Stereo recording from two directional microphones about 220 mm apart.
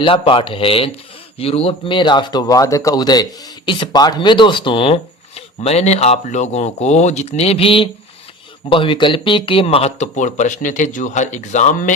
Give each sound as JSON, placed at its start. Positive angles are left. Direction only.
{"t": 0.0, "sound": "speech", "side_deg": 25}